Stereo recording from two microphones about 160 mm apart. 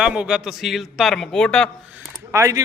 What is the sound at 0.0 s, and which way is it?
A man's voice, 5° right (ahead or behind).